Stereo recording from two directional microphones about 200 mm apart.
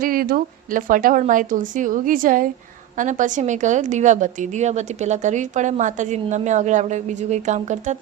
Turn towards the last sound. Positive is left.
turn(degrees=-35)  # may be behind; listen again after turning